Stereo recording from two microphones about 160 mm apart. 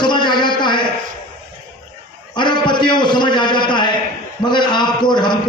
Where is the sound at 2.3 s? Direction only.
30° left (ahead or behind).